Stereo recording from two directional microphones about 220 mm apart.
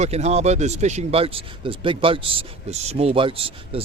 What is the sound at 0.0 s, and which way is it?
Speech, 30° right (ahead or behind).